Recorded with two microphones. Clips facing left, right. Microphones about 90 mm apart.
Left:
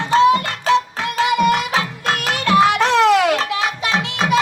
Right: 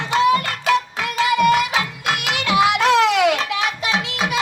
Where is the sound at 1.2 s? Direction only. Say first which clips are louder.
Even; 35° left (ahead or behind).